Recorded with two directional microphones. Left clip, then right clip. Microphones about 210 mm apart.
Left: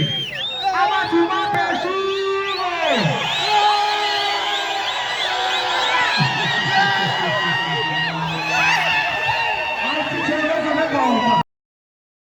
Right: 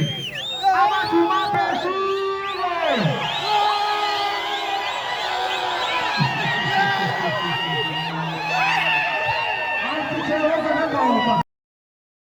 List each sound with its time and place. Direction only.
0.7 s music: 25° right (ahead or behind)
6.7 s a sound: 40° right (ahead or behind)
8.5 s music: 40° left (ahead or behind)